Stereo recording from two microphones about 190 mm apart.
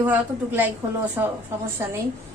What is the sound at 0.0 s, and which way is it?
A woman's voice, 10° right (ahead or behind).